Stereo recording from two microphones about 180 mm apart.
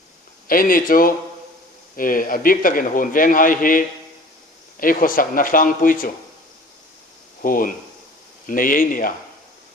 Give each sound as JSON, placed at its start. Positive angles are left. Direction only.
{"t": 0.4, "sound": "a man's voice", "side_deg": 50}
{"t": 7.4, "sound": "a man's voice", "side_deg": 50}